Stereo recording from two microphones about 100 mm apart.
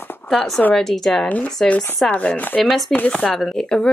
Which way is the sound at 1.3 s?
15° left (ahead or behind).